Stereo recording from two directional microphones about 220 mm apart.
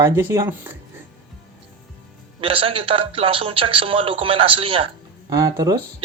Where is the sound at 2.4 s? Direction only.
25° right (ahead or behind).